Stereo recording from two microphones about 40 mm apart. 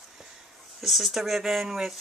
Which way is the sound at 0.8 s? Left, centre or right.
Centre.